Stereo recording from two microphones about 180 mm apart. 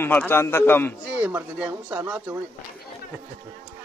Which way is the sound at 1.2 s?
10° right (ahead or behind).